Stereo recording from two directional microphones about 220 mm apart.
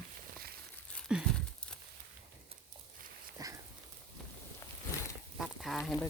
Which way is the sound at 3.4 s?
15° right (ahead or behind).